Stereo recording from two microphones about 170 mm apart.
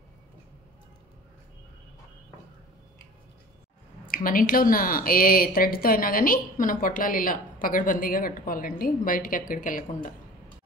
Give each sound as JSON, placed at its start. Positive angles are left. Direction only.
{"t": 4.1, "sound": "a woman's voice", "side_deg": 55}